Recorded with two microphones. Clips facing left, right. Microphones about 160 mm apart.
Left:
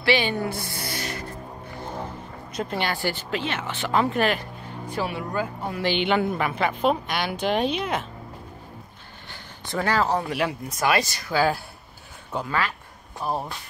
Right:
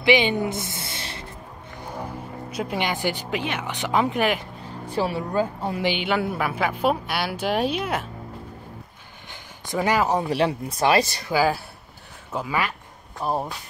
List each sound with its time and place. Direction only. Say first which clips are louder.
0.0 s speech: right 3 dB; 15° right (ahead or behind)
1.8 s speech: right 1 dB; 10° right (ahead or behind)
4.9 s speech: right 4 dB; 30° right (ahead or behind)
5.8 s a woman's voice: left 2 dB; 10° right (ahead or behind)
9.3 s a sound: right 2 dB; 15° right (ahead or behind)
10.3 s speech: right 4 dB; 30° right (ahead or behind)
11.3 s speech: right 1 dB; centre (ahead or behind)
13.2 s a woman's voice: right 2 dB; 15° right (ahead or behind)